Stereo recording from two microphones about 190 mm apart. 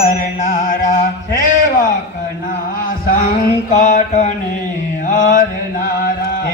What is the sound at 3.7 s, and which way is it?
Mantra, 40° left (ahead or behind).